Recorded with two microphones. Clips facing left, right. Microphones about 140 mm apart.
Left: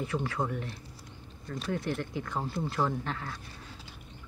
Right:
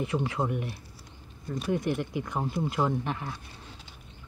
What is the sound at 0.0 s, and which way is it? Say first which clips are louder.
Speech: right 3 dB; 20° right (ahead or behind).